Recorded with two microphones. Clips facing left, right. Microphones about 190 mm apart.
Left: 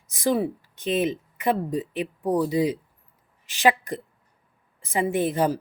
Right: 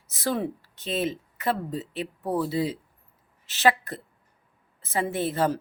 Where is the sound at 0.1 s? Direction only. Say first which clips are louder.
Left 4 dB; 15° left (ahead or behind).